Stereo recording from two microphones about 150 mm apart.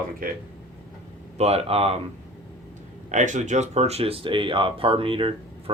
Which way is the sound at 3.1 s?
55° right (ahead or behind).